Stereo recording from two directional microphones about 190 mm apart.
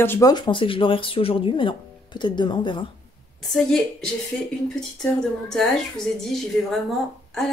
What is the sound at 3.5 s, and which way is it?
A woman's voice, 5° left (ahead or behind).